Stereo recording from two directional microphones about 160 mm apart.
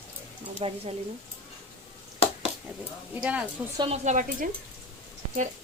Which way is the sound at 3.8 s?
45° right (ahead or behind).